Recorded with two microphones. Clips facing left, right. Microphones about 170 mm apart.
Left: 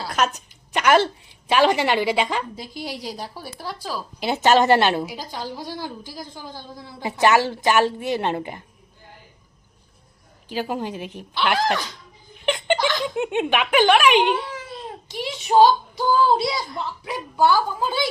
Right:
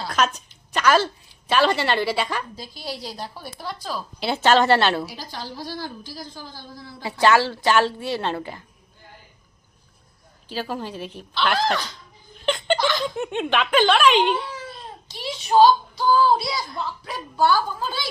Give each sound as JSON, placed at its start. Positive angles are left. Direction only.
{"t": 0.0, "sound": "a woman's voice", "side_deg": 10}
{"t": 10.5, "sound": "a woman's voice", "side_deg": 15}
{"t": 12.5, "sound": "chuckle", "side_deg": 15}
{"t": 13.1, "sound": "a woman's voice", "side_deg": 15}